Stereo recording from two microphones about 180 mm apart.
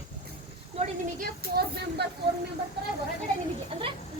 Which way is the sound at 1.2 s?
60° right (ahead or behind).